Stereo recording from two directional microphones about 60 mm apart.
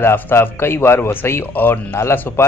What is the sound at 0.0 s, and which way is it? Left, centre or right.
A man's voice, left.